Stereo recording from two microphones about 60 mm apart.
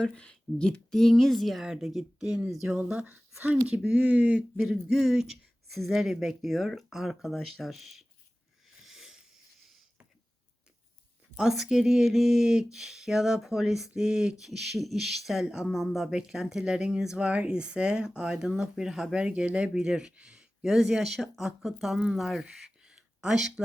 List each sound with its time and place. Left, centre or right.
0.0 s speech: centre
2.2 s speech: centre
3.1 s speech: right
3.8 s speech: centre
4.6 s speech: centre
8.8 s a sound: centre
11.3 s a sound: centre
19.7 s speech: centre